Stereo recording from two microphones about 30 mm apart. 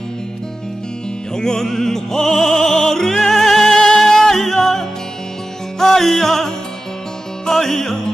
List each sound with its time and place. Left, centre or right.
1.3 s music: left